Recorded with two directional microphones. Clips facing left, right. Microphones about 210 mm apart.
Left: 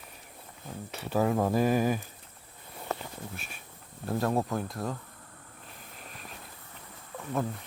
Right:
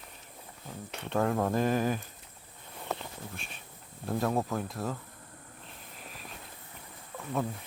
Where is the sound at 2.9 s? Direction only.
5° left (ahead or behind).